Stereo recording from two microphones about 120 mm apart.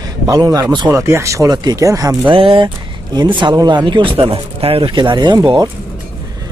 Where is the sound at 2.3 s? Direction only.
45° right (ahead or behind).